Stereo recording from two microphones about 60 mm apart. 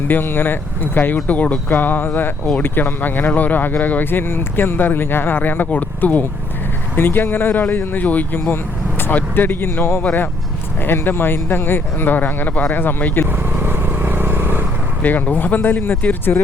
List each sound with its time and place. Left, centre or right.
0.1 s speech: left
13.6 s vehicle: right
15.0 s speech: left